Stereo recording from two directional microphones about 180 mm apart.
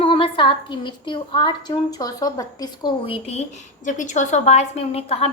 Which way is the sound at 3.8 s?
45° left (ahead or behind).